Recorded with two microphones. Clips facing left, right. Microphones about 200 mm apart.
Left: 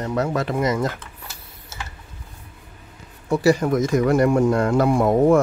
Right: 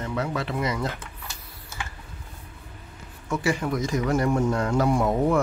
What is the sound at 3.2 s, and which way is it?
Speech, 35° left (ahead or behind).